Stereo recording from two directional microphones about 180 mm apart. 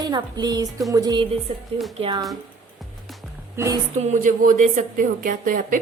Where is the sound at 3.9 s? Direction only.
40° right (ahead or behind).